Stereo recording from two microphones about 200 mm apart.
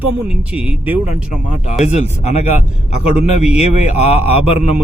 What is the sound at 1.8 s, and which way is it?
Speech, 35° left (ahead or behind).